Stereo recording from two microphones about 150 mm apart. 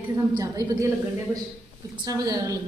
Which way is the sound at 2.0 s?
25° right (ahead or behind).